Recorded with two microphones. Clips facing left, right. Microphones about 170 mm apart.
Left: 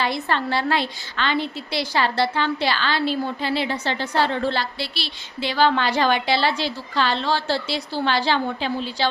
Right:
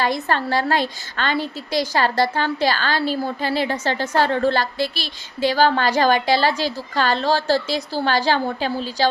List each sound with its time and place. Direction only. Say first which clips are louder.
0.0 s a woman's voice: right 2 dB; 45° right (ahead or behind)